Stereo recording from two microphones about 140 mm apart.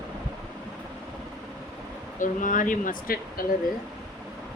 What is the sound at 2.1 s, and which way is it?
Speech, 70° left (ahead or behind).